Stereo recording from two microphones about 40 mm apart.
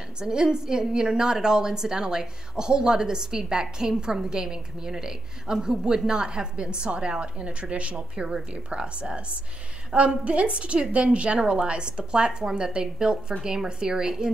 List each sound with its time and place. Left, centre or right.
0.2 s a woman's voice: centre